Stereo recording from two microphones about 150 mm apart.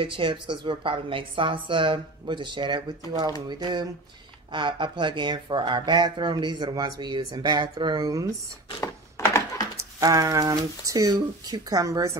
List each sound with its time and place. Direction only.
0.0 s speech: 35° right (ahead or behind)
8.8 s a sound: 20° left (ahead or behind)
9.8 s speech: 20° right (ahead or behind)